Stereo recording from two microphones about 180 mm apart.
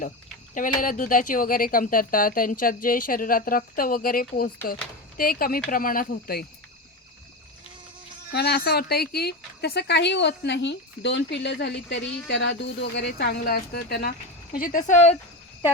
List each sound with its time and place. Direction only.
0.8 s speech: 50° left (ahead or behind)
8.3 s speech: 65° left (ahead or behind); by 15.1 s 40° left (ahead or behind)